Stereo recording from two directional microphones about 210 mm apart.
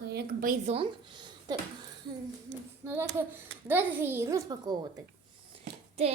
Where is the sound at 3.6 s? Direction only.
10° right (ahead or behind).